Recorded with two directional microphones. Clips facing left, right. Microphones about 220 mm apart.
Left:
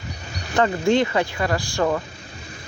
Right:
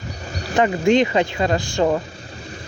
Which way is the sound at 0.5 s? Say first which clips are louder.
Right 2 dB; 20° right (ahead or behind).